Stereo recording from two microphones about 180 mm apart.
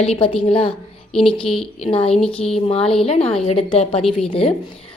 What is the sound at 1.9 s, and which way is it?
Speech, 30° left (ahead or behind).